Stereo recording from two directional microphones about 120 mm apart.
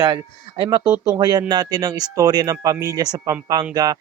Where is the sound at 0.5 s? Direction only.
45° right (ahead or behind).